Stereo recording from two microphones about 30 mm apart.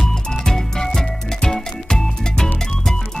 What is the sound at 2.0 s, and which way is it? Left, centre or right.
Music, centre.